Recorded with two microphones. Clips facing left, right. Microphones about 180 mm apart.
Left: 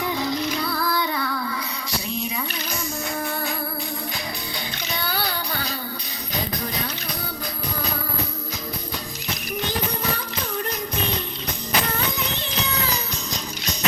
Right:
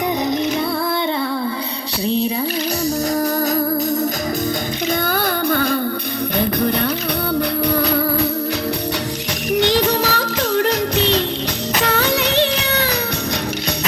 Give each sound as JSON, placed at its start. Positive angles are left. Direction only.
{"t": 5.0, "sound": "music", "side_deg": -50}
{"t": 6.4, "sound": "a sound", "side_deg": -60}
{"t": 7.8, "sound": "music", "side_deg": -70}
{"t": 9.5, "sound": "music", "side_deg": -80}